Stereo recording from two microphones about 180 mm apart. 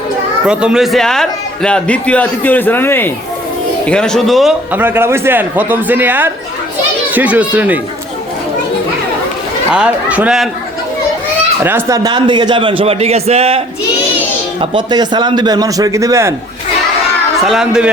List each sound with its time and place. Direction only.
0.4 s a man's voice: 5° right (ahead or behind)
4.7 s speech: 10° right (ahead or behind)
9.7 s a man's voice: 5° right (ahead or behind)
11.6 s a man's voice: 15° right (ahead or behind); by 13.6 s 35° right (ahead or behind)
14.6 s a man's voice: 25° right (ahead or behind)
17.4 s a man's voice: 5° right (ahead or behind)